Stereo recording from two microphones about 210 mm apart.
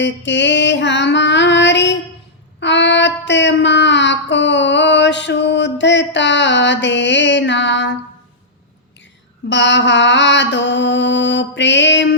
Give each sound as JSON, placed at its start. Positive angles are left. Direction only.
{"t": 0.0, "sound": "mantra", "side_deg": 55}
{"t": 2.6, "sound": "child singing", "side_deg": 55}
{"t": 6.1, "sound": "mantra", "side_deg": 60}
{"t": 9.5, "sound": "mantra", "side_deg": 60}